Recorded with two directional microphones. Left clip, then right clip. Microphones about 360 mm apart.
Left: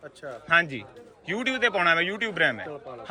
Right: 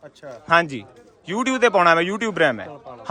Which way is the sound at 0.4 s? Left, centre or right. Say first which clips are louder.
Right 4 dB; centre.